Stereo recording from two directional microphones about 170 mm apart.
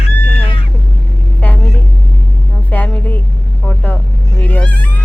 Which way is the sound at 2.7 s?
10° left (ahead or behind).